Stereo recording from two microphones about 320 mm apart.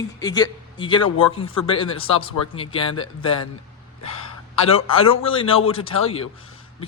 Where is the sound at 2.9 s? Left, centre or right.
Left.